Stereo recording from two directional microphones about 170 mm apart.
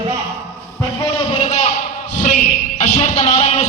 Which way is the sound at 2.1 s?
45° left (ahead or behind).